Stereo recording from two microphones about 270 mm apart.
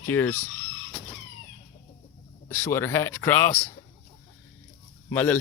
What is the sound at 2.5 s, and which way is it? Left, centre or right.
Speech, centre.